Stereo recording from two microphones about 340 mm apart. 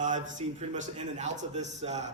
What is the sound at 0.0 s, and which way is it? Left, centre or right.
A man's voice, right.